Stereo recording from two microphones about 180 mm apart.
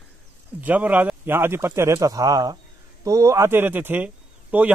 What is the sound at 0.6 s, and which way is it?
A man's voice, 10° right (ahead or behind).